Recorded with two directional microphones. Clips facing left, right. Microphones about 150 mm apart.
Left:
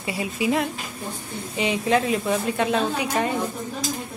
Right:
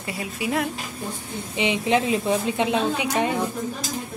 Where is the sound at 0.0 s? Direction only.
5° left (ahead or behind).